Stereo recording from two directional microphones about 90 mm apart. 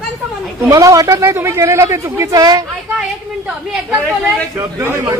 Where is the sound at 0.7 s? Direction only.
40° right (ahead or behind).